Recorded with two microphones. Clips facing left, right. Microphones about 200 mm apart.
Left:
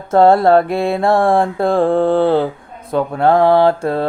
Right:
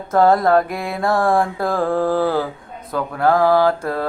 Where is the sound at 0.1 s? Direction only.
30° left (ahead or behind).